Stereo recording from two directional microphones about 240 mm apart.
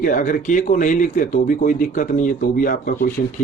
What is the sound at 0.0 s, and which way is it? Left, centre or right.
Speech, left.